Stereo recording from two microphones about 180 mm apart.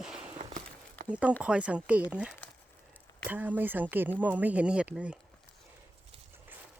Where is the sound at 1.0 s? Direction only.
5° right (ahead or behind).